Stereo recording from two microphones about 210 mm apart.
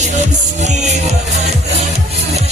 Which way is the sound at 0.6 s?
35° right (ahead or behind).